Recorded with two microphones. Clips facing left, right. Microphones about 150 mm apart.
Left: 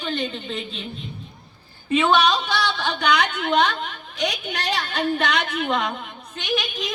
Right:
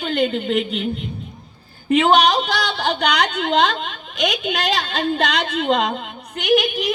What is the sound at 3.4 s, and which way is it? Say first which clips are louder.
A woman's voice: right 2 dB; 90° right.